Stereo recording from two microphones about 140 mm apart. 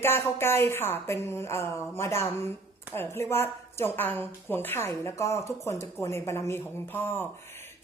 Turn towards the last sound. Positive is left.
turn(degrees=15)  # may be behind; listen again after turning